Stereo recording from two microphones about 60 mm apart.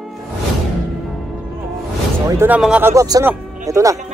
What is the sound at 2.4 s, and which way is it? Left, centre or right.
Speech, right.